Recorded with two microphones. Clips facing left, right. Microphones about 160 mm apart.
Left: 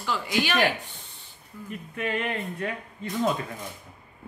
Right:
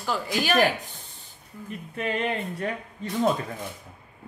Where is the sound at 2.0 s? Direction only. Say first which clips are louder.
Right 2 dB; 30° right (ahead or behind).